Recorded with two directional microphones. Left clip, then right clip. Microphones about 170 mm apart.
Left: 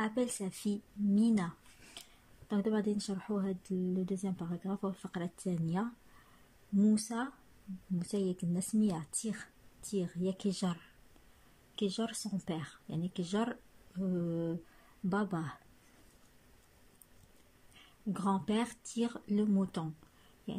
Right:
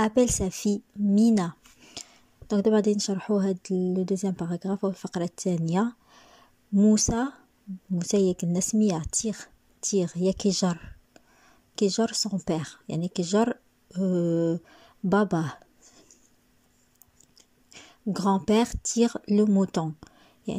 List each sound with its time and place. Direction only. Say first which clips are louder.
0.0 s speech: right 12 dB; 30° right (ahead or behind)
2.0 s a sound: right 12 dB; 30° right (ahead or behind)
3.1 s speech: right 11 dB; 30° right (ahead or behind)
17.7 s speech: right 9 dB; 30° right (ahead or behind)